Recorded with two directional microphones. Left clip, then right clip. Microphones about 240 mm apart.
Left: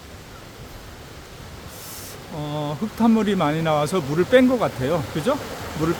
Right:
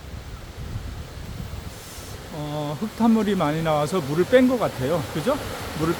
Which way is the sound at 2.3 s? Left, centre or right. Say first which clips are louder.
Left 2 dB; centre.